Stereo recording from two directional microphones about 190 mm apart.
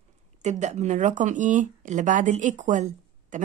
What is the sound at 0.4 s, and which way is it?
Speech, 40° right (ahead or behind).